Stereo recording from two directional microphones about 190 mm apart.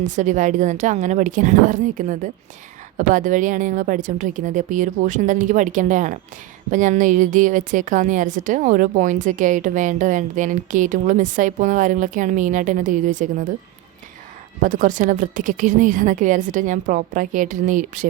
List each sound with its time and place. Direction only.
0.2 s a woman's voice: 40° right (ahead or behind)
14.6 s a woman's voice: 45° right (ahead or behind)